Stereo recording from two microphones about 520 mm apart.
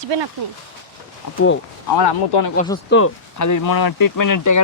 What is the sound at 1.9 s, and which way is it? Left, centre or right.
Speech, left.